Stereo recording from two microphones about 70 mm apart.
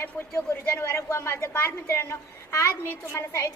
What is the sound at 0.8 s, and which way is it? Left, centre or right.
A woman's voice, left.